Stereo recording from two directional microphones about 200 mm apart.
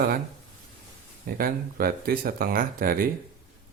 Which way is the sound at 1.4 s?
50° right (ahead or behind).